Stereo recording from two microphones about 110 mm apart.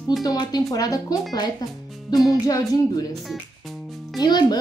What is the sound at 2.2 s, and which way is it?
Speech, 35° left (ahead or behind).